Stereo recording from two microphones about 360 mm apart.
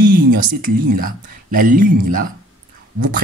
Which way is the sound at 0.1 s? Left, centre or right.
Right.